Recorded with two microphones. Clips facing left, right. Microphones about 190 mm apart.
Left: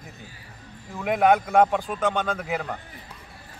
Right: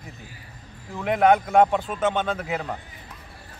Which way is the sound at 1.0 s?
Centre (ahead or behind).